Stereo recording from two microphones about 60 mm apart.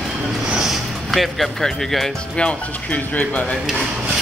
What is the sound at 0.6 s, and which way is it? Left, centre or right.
Music, centre.